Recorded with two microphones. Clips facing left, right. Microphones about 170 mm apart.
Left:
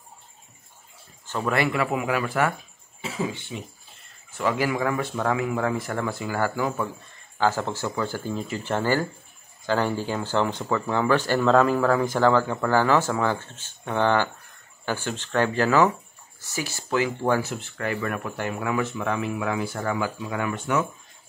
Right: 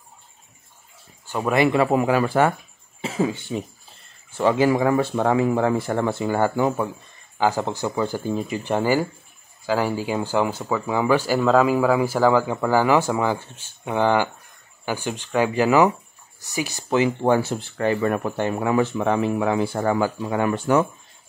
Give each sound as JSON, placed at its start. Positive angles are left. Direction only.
{"t": 1.2, "sound": "speech", "side_deg": -15}
{"t": 1.7, "sound": "speech", "side_deg": -35}
{"t": 4.4, "sound": "speech", "side_deg": -30}